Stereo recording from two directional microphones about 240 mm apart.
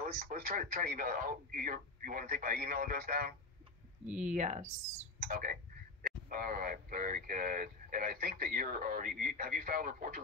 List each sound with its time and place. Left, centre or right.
0.0 s speech: right